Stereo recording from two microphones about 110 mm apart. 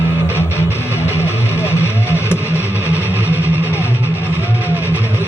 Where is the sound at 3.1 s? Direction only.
20° right (ahead or behind).